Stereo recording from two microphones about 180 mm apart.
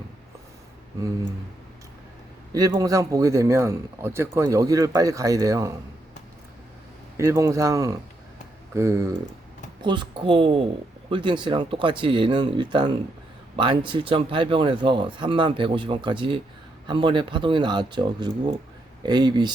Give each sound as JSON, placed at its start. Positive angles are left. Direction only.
{"t": 2.5, "sound": "a man's voice", "side_deg": -20}
{"t": 7.2, "sound": "a man's voice", "side_deg": -15}